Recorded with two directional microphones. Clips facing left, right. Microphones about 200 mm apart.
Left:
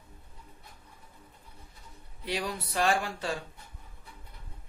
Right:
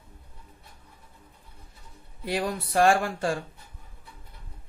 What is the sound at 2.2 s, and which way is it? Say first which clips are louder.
Speech: right 5 dB; 50° right (ahead or behind).